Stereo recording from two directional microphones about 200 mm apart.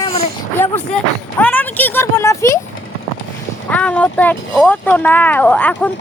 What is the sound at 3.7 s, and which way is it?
Speech, 5° left (ahead or behind).